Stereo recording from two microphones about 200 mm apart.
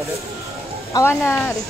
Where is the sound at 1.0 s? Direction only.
15° left (ahead or behind).